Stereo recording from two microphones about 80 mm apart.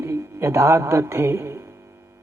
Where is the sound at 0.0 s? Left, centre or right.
Right.